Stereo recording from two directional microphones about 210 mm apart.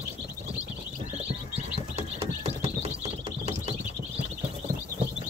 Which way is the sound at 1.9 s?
30° right (ahead or behind).